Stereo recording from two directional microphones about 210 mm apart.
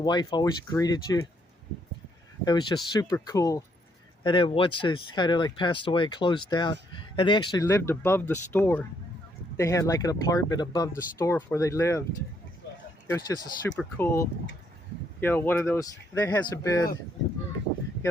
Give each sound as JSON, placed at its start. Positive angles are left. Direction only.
{"t": 0.0, "sound": "speech", "side_deg": 20}
{"t": 2.4, "sound": "speech", "side_deg": 20}
{"t": 13.1, "sound": "speech", "side_deg": 15}